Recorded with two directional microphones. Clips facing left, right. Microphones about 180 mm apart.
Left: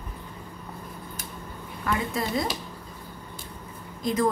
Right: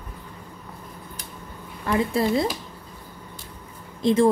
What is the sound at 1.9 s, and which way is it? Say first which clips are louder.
Speech: right 6 dB; 30° right (ahead or behind).